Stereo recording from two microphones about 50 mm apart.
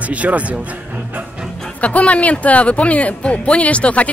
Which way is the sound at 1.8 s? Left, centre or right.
Left.